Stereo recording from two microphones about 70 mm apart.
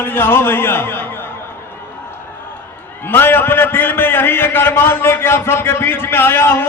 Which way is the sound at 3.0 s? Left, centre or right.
Left.